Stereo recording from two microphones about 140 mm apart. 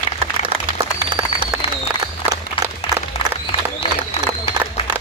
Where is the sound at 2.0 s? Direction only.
30° right (ahead or behind).